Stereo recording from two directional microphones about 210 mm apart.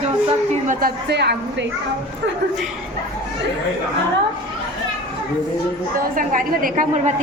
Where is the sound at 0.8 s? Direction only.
50° right (ahead or behind).